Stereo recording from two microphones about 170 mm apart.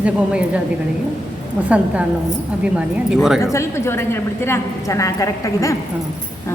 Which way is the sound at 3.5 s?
15° left (ahead or behind).